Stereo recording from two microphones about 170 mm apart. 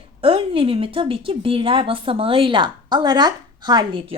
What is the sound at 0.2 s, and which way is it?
A woman's voice, 30° right (ahead or behind).